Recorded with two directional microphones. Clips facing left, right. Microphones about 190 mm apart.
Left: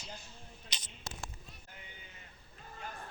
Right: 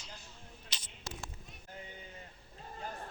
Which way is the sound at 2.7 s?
35° right (ahead or behind).